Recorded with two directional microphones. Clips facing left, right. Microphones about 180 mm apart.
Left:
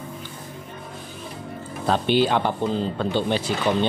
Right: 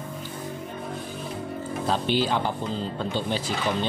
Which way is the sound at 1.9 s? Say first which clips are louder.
Left 5 dB; 65° left (ahead or behind).